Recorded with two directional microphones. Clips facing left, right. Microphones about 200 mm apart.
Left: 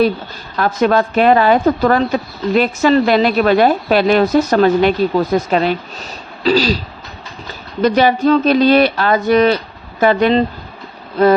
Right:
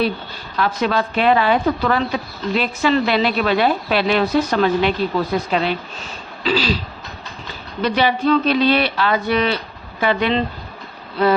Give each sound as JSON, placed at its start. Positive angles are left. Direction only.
{"t": 0.5, "sound": "speech", "side_deg": 45}
{"t": 7.8, "sound": "speech", "side_deg": 45}